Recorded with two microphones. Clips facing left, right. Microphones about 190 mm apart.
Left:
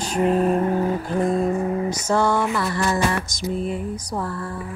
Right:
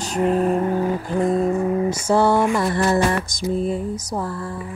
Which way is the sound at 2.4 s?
20° right (ahead or behind).